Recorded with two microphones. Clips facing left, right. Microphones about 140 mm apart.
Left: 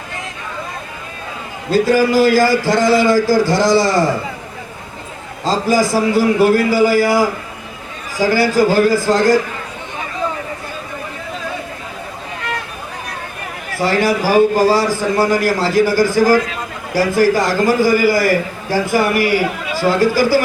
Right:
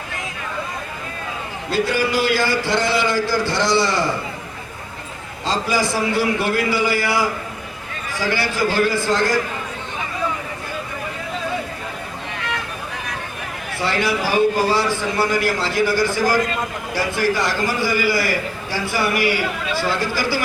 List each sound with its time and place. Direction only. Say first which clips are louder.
1.7 s a man's voice: left 7 dB; 40° left (ahead or behind)
5.5 s a man's voice: left 6 dB; 40° left (ahead or behind)
13.8 s a man's voice: left 6 dB; 40° left (ahead or behind)